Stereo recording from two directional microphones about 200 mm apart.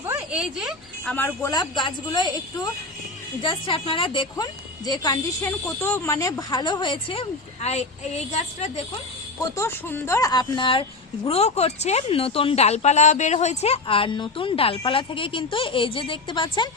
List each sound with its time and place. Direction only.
0.1 s a sound: 5° right (ahead or behind)
1.1 s speech: 10° left (ahead or behind)
3.4 s a woman's voice: 25° left (ahead or behind)
9.6 s speech: 10° left (ahead or behind)